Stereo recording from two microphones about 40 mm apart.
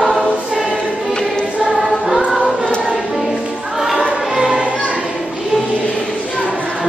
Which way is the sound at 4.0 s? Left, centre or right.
Centre.